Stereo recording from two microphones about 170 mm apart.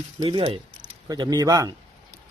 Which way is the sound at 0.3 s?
30° right (ahead or behind).